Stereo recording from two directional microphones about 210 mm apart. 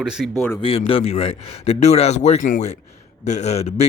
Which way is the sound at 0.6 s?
25° left (ahead or behind).